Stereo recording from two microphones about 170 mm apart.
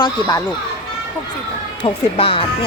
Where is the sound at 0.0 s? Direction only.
20° left (ahead or behind).